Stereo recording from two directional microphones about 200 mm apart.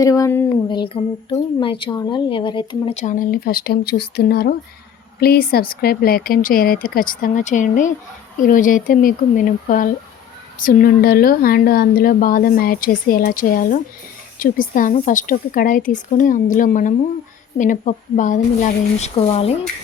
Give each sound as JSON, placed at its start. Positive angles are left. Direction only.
{"t": 0.0, "sound": "a woman's voice", "side_deg": 15}